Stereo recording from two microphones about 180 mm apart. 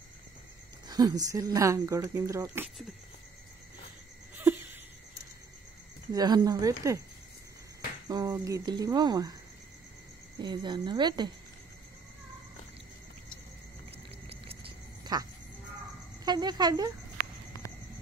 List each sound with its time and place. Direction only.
0.8 s speech: 20° right (ahead or behind)
6.1 s speech: 20° right (ahead or behind)
8.1 s speech: 20° right (ahead or behind)
10.4 s speech: 25° right (ahead or behind)
14.3 s frog: 30° right (ahead or behind)
16.3 s speech: 25° right (ahead or behind)